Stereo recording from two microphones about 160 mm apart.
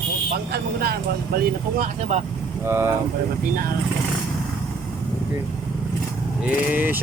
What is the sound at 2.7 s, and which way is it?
Speech, 15° right (ahead or behind).